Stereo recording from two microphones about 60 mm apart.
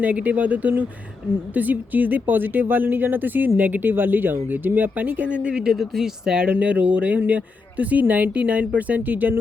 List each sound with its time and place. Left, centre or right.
0.0 s speech: right
5.6 s speech: centre
6.5 s speech: right